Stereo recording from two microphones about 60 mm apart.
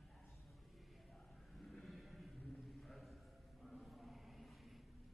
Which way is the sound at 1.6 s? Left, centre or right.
Centre.